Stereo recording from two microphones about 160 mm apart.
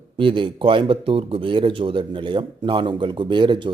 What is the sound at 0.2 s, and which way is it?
Speech, 30° right (ahead or behind).